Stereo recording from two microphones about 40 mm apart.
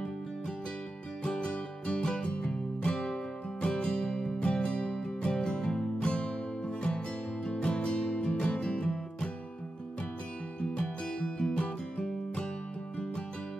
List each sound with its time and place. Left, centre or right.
1.2 s music: left
10.6 s music: left